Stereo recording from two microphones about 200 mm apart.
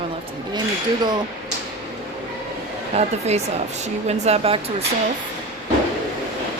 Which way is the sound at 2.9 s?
35° right (ahead or behind).